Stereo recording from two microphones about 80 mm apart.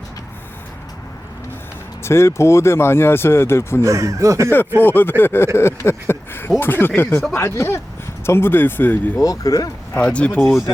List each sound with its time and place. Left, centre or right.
2.0 s speech: left
3.8 s speech: right
4.8 s speech: left
9.1 s speech: left
10.0 s speech: centre